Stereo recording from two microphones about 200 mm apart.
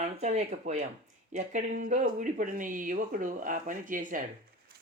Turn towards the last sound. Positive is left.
turn(degrees=-40)  # may be behind; listen again after turning